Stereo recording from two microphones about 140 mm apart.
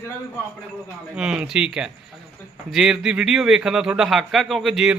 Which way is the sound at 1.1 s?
5° right (ahead or behind).